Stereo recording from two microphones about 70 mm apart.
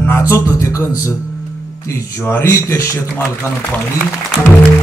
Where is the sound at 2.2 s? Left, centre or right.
Left.